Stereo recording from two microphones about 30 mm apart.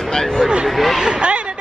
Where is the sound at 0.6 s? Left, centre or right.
Centre.